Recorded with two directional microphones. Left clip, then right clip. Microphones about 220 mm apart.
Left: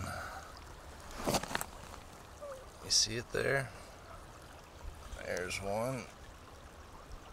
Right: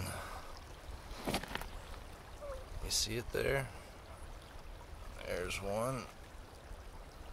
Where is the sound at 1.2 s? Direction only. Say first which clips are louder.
Left 5 dB; 40° left (ahead or behind).